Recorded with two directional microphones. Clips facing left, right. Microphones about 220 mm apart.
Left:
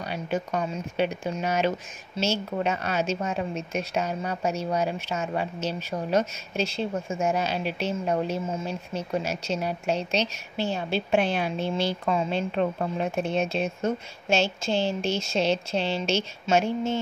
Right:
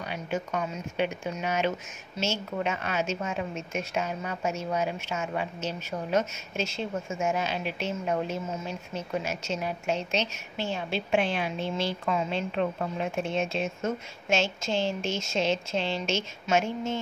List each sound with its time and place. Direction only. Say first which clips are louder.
0.1 s a woman's voice: left 3 dB; 35° left (ahead or behind)